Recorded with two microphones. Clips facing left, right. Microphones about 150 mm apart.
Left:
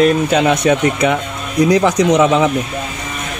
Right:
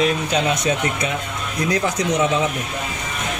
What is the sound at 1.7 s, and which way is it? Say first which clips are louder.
Speech: left 6 dB; 90° left.